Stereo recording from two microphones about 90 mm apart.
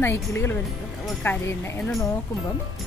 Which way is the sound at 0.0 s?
30° left (ahead or behind).